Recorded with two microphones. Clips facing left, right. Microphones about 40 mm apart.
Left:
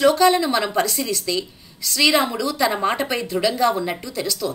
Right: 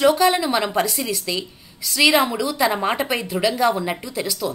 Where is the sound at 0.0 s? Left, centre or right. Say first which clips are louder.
Left 1 dB; centre.